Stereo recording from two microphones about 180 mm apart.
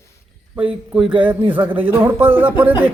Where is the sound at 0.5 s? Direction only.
5° right (ahead or behind).